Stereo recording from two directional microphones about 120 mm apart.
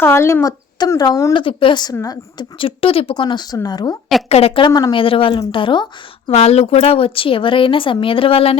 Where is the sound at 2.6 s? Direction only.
50° left (ahead or behind); by 3.9 s 35° left (ahead or behind).